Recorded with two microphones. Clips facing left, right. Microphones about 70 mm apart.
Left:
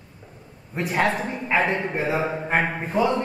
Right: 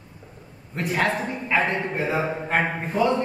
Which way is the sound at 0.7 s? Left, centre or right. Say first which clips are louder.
Left 1 dB; centre.